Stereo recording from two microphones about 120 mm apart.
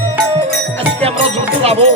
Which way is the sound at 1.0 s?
55° right (ahead or behind).